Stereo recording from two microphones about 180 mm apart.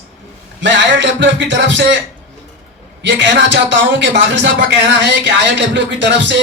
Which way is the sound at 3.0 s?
85° right.